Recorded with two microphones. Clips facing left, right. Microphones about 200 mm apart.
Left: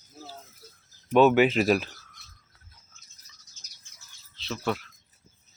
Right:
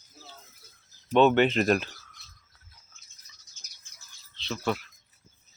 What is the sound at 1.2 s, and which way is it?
Speech, 5° left (ahead or behind).